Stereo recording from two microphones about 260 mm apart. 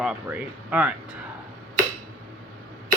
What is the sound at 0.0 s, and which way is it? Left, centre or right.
Speech, centre.